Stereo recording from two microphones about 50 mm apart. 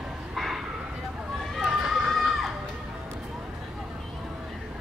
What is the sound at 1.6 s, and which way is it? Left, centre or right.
Run, centre.